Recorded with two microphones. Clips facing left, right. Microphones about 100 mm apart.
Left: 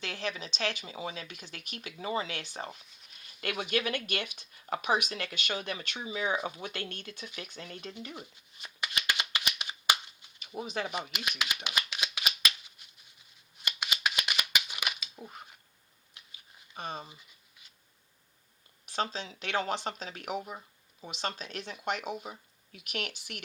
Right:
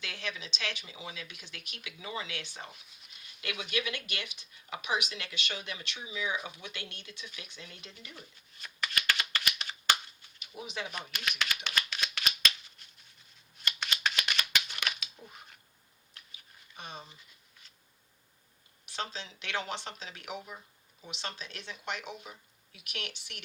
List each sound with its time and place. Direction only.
0.0 s speech: 45° left (ahead or behind)
8.1 s shuffling cards: 20° left (ahead or behind)
10.4 s speech: 45° left (ahead or behind)
10.9 s shuffling cards: 15° left (ahead or behind)
13.6 s a sound: 10° left (ahead or behind)
15.2 s speech: 45° left (ahead or behind)
16.7 s speech: 45° left (ahead or behind)
18.9 s speech: 50° left (ahead or behind)